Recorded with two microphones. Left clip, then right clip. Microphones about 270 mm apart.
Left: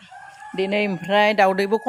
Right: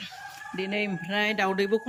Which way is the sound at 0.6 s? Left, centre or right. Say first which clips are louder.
Left 8 dB; centre.